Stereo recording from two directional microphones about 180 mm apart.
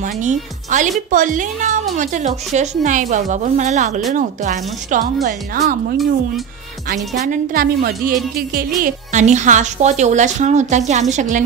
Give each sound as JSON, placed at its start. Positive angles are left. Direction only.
{"t": 0.0, "sound": "a woman's voice", "side_deg": -45}
{"t": 7.2, "sound": "a woman's voice", "side_deg": -50}